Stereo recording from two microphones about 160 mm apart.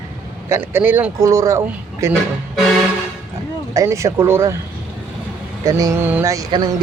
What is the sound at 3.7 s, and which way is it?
Speech, 20° right (ahead or behind).